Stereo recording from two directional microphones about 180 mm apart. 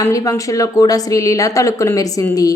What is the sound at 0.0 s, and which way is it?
A woman's voice, 20° left (ahead or behind).